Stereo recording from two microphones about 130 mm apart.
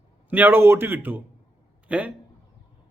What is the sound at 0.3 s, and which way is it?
A man's voice, 15° right (ahead or behind).